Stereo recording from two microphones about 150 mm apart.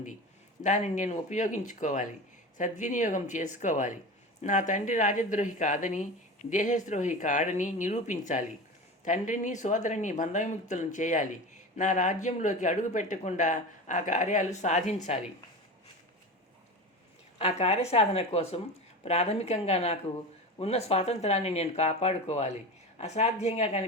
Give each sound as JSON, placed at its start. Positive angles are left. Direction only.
{"t": 0.6, "sound": "speech", "side_deg": 55}
{"t": 17.3, "sound": "speech", "side_deg": 45}